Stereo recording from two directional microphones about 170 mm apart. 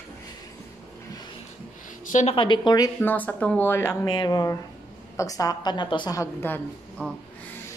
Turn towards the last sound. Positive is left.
turn(degrees=5)  # may be behind; listen again after turning